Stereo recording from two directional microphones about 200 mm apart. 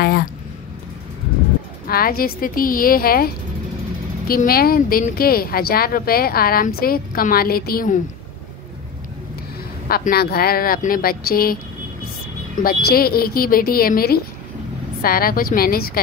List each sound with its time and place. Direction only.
1.9 s speech: 50° left (ahead or behind)
4.3 s speech: 50° left (ahead or behind)
9.8 s speech: 50° left (ahead or behind)
12.6 s speech: 50° left (ahead or behind)